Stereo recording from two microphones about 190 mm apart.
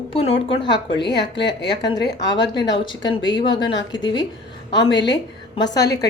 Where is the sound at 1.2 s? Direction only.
65° left (ahead or behind).